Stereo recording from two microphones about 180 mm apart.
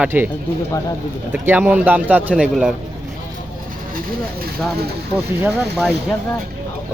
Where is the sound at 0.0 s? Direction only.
10° right (ahead or behind).